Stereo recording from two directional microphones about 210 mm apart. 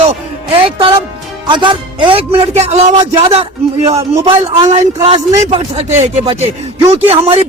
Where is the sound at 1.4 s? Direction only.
20° right (ahead or behind).